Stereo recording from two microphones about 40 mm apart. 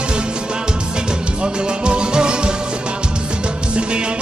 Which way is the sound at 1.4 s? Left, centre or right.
Right.